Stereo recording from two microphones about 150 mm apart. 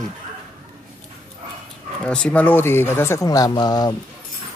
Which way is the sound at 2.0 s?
5° left (ahead or behind).